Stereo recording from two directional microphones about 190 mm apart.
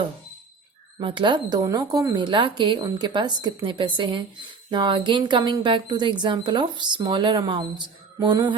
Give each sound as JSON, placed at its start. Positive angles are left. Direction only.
{"t": 0.9, "sound": "speech", "side_deg": -25}